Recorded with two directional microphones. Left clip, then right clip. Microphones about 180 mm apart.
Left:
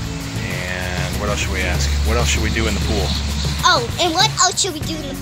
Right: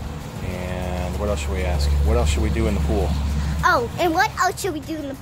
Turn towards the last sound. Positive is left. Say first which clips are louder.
# left 4 dB
turn(degrees=-10)  # may be behind; listen again after turning